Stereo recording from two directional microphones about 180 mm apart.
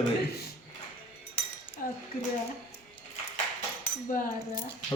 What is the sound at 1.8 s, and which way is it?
Dishes, 50° left (ahead or behind).